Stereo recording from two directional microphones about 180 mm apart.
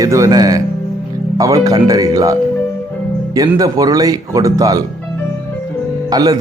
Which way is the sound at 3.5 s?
20° right (ahead or behind).